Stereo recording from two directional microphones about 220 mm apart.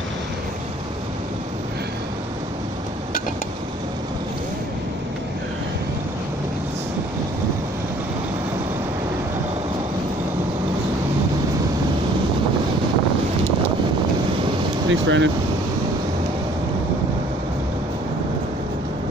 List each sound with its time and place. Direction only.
14.9 s speech: 60° right (ahead or behind)